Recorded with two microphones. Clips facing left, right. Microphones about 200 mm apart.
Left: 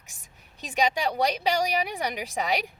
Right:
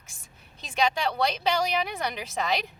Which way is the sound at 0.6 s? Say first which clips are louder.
Left 1 dB; 15° left (ahead or behind).